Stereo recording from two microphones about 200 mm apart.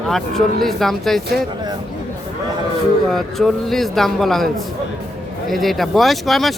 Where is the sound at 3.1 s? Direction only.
Centre (ahead or behind).